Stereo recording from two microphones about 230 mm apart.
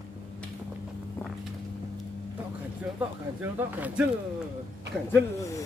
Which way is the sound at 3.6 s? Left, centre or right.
Centre.